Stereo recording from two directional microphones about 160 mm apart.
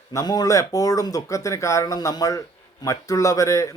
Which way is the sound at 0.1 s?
25° left (ahead or behind).